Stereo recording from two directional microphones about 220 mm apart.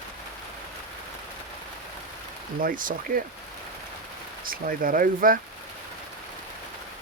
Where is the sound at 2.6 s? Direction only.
40° right (ahead or behind).